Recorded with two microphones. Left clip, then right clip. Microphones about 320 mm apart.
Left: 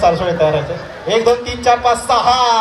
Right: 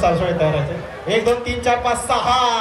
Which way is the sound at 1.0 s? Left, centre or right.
Centre.